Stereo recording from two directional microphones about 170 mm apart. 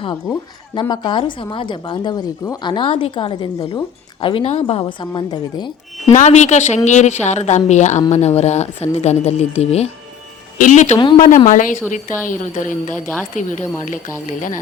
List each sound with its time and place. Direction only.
0.7 s a woman's voice: 25° left (ahead or behind)
6.1 s a woman's voice: 45° left (ahead or behind)